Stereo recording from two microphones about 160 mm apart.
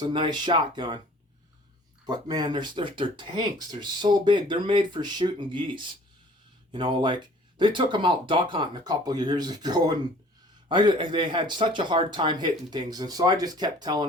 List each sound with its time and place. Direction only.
0.0 s speech: 30° right (ahead or behind)
2.0 s speech: 25° right (ahead or behind)